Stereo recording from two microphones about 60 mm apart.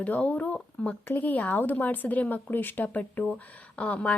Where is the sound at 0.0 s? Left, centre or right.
Left.